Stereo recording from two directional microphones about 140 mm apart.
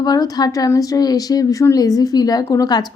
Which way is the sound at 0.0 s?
30° left (ahead or behind).